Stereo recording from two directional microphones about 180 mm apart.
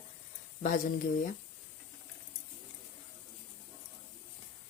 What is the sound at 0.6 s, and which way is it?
Speech, 45° left (ahead or behind).